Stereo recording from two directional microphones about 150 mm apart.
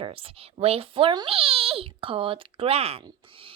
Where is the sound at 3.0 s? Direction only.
35° right (ahead or behind).